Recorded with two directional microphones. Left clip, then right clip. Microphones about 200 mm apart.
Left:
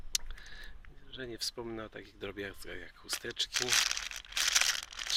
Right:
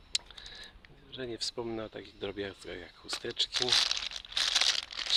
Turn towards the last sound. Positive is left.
turn(degrees=-25)  # may be behind; listen again after turning